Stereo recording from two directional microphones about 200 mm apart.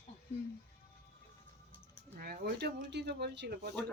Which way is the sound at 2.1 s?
45° right (ahead or behind).